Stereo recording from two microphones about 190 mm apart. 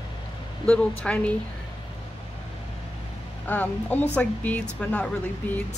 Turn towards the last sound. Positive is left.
turn(degrees=5)  # may be behind; listen again after turning